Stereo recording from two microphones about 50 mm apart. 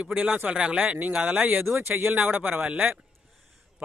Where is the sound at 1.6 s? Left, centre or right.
Right.